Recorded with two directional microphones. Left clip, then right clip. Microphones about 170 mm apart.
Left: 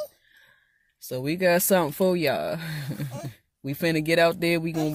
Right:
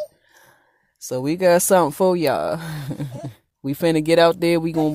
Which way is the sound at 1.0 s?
30° right (ahead or behind).